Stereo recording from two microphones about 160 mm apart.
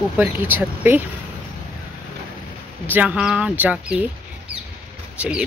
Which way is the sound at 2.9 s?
10° right (ahead or behind).